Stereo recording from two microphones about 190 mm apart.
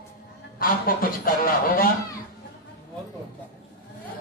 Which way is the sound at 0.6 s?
50° left (ahead or behind).